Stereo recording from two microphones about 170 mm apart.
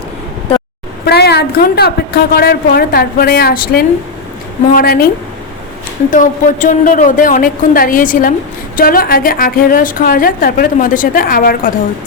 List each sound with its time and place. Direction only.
1.0 s a woman's voice: 75° left (ahead or behind)
6.1 s a woman's voice: 50° left (ahead or behind)